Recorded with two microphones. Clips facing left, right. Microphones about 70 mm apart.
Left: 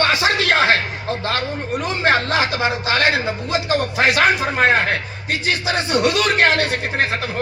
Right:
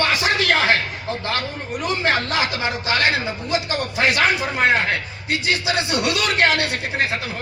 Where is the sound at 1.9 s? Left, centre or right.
Left.